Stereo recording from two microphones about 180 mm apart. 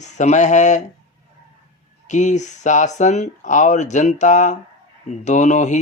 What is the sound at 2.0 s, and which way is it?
Speech, 40° left (ahead or behind).